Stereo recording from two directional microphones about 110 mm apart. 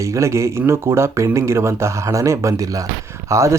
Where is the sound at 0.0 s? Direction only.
25° right (ahead or behind).